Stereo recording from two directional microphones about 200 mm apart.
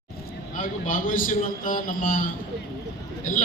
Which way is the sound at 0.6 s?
40° left (ahead or behind).